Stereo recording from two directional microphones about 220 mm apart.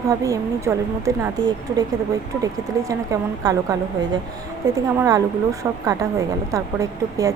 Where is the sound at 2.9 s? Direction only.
15° right (ahead or behind).